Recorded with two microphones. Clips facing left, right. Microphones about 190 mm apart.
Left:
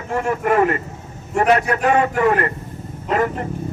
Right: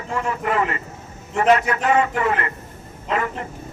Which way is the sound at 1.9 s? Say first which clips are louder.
Left 3 dB; 45° left (ahead or behind).